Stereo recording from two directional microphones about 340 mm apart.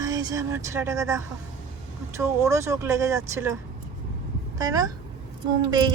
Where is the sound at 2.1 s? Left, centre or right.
Centre.